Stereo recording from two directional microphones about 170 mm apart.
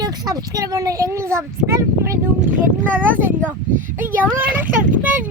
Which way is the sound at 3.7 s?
50° right (ahead or behind).